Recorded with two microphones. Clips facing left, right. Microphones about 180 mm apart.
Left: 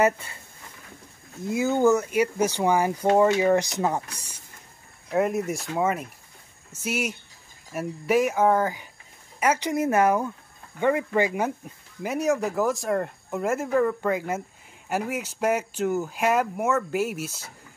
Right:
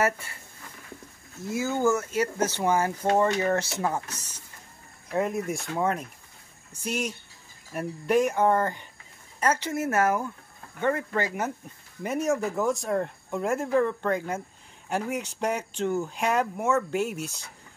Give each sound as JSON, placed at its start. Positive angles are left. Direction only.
{"t": 0.0, "sound": "speech", "side_deg": 20}
{"t": 1.4, "sound": "speech", "side_deg": 20}
{"t": 12.0, "sound": "speech", "side_deg": 0}